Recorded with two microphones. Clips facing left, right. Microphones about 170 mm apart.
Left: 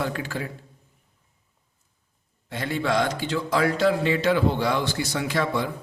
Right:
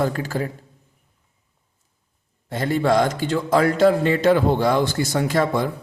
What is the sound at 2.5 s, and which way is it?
A man's voice, 40° right (ahead or behind).